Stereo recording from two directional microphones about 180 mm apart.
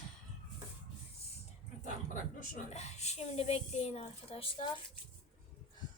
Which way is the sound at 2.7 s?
40° left (ahead or behind).